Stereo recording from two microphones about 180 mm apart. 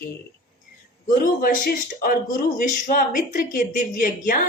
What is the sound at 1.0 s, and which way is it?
A man's voice, 50° left (ahead or behind).